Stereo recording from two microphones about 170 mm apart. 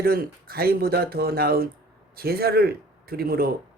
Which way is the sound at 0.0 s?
60° right (ahead or behind).